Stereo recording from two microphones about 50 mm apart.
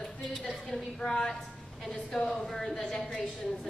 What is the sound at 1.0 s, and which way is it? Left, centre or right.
A woman's voice, centre.